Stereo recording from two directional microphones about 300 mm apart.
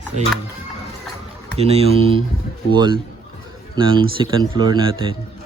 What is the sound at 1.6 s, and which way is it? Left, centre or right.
Speech, centre.